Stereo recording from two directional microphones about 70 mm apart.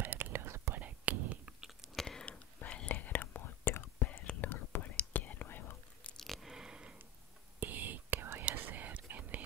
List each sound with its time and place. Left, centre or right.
0.0 s whispering: right
0.7 s whispering: right
1.6 s a sound: centre
2.0 s whispering: centre; by 5.8 s left
6.0 s chewing: centre
6.5 s a sound: centre
7.6 s whispering: right